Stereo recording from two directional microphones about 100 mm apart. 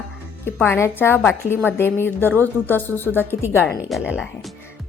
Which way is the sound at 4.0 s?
10° right (ahead or behind).